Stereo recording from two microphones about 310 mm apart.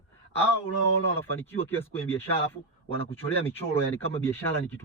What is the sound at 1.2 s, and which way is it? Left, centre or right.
Speech, centre.